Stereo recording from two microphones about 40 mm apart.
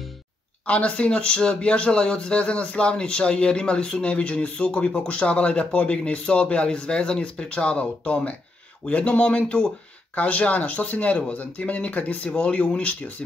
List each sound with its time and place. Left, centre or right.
0.7 s speech: left